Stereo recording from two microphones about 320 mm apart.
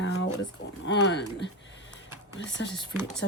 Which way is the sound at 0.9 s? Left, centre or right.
Left.